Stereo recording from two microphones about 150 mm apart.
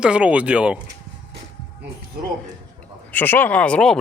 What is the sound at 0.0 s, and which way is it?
Speech, 5° right (ahead or behind).